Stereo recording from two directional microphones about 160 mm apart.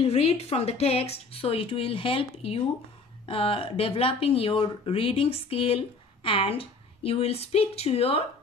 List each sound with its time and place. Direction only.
0.0 s speech: 40° left (ahead or behind)